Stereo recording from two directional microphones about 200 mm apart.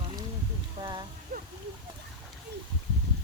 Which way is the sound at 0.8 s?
20° right (ahead or behind).